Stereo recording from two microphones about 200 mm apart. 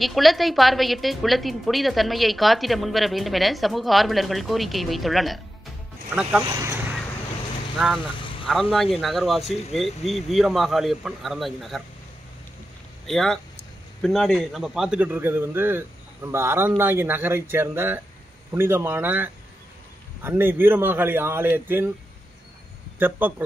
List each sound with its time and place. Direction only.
0.0 s a woman's voice: centre (ahead or behind)
8.2 s vehicle: 25° left (ahead or behind)
8.5 s a woman's voice: centre (ahead or behind)
9.4 s speech: 30° left (ahead or behind)
9.8 s a woman's voice: centre (ahead or behind)
13.0 s a man's voice: centre (ahead or behind)
22.9 s a man's voice: 10° right (ahead or behind)